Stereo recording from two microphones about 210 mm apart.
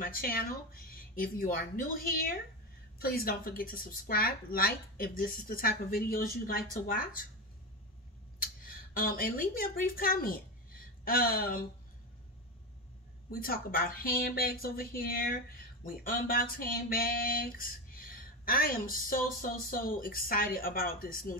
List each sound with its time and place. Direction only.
0.0 s speech: 45° left (ahead or behind)
8.4 s speech: 40° left (ahead or behind)
13.3 s speech: 45° left (ahead or behind)